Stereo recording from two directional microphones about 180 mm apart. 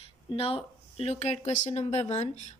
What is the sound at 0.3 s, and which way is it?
A woman's voice, 30° left (ahead or behind).